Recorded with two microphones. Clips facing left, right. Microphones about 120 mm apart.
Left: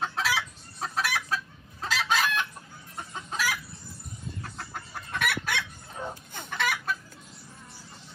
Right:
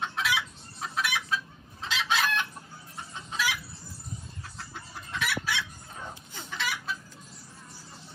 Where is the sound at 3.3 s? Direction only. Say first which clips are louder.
Even; 45° left (ahead or behind).